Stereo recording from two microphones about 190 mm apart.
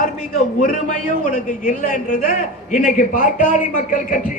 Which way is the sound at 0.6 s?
40° left (ahead or behind).